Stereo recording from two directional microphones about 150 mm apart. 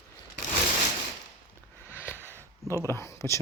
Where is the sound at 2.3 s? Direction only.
20° right (ahead or behind).